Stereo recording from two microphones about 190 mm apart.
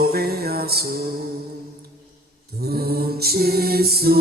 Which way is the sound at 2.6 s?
55° right (ahead or behind).